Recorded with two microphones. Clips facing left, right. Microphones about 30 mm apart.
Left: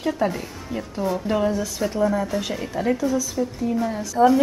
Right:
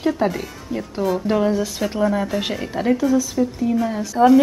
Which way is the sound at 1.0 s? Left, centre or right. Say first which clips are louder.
Right 3 dB; centre.